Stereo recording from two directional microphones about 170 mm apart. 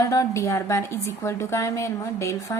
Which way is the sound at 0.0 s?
20° left (ahead or behind).